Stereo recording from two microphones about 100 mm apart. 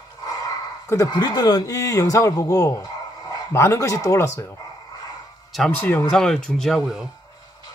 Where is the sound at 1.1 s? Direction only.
45° left (ahead or behind).